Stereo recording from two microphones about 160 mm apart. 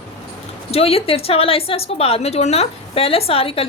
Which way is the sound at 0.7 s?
40° left (ahead or behind).